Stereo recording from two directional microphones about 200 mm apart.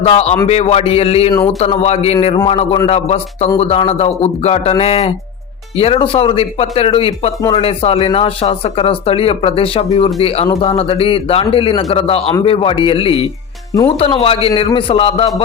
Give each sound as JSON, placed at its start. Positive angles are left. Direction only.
{"t": 0.0, "sound": "speech", "side_deg": 30}